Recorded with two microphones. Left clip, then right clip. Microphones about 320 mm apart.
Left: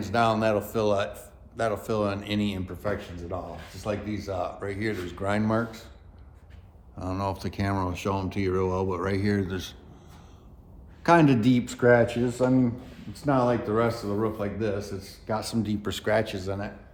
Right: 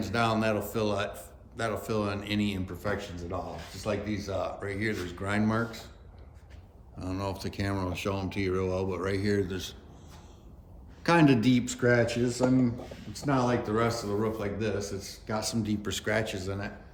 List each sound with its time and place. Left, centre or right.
0.0 s a man's voice: centre
7.0 s a man's voice: centre
11.0 s a man's voice: centre